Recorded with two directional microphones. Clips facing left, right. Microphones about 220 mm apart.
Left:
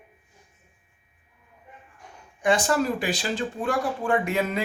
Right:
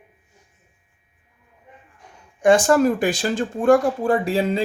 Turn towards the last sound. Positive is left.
turn(degrees=-30)  # may be behind; listen again after turning